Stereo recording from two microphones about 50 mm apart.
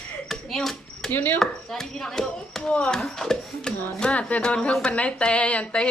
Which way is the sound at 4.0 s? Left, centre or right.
Left.